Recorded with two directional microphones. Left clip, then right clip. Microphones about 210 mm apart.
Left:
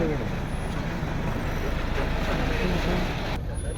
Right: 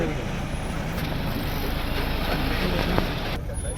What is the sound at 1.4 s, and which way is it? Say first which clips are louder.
Vehicle: right 1 dB; 45° right (ahead or behind).